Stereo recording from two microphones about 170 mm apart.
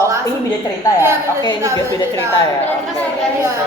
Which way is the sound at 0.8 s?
20° left (ahead or behind).